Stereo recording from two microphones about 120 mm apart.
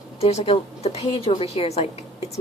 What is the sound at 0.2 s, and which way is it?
A woman's voice, 60° left (ahead or behind).